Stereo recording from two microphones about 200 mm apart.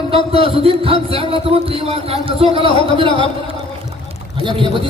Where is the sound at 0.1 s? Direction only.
30° right (ahead or behind).